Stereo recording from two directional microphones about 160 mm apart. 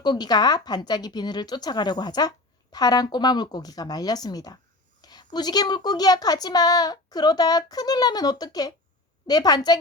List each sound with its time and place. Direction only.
0.0 s a woman's voice: 25° left (ahead or behind)